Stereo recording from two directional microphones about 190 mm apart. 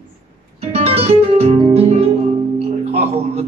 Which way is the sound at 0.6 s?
35° right (ahead or behind).